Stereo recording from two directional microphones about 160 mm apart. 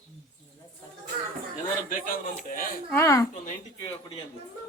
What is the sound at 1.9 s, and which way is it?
Speech, 60° left (ahead or behind).